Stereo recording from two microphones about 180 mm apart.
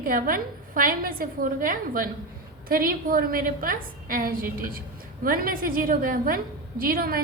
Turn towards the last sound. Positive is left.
turn(degrees=-55)  # may be behind; listen again after turning